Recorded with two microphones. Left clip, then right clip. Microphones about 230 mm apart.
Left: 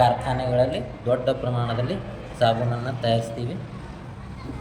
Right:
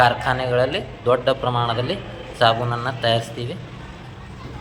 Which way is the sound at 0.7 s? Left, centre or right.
Centre.